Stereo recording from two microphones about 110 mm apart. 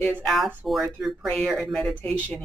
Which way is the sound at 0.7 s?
Centre (ahead or behind).